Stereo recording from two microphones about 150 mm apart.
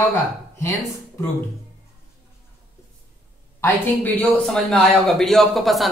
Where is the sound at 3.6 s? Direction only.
10° left (ahead or behind).